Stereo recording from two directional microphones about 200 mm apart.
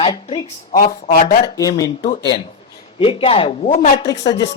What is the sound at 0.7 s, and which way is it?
Speech, 45° left (ahead or behind).